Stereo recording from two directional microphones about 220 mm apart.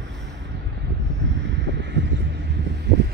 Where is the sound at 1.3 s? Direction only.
50° right (ahead or behind).